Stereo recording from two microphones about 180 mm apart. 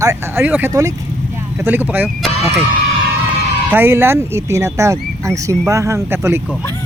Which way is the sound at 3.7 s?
10° right (ahead or behind).